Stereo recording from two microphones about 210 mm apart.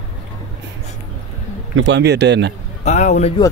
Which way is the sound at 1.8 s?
60° right (ahead or behind).